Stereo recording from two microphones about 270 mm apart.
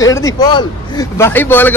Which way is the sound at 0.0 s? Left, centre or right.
Centre.